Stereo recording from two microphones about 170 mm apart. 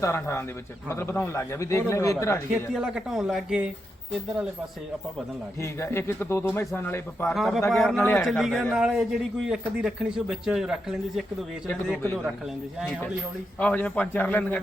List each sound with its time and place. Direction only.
0.0 s a man's voice: 15° left (ahead or behind)
2.5 s a man's voice: 5° right (ahead or behind)
5.5 s a man's voice: 15° left (ahead or behind)
7.3 s a man's voice: centre (ahead or behind)
7.9 s a man's voice: 10° left (ahead or behind)
8.2 s a man's voice: centre (ahead or behind)